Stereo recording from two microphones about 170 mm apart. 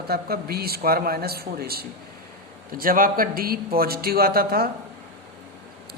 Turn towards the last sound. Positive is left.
turn(degrees=-60)  # may be behind; listen again after turning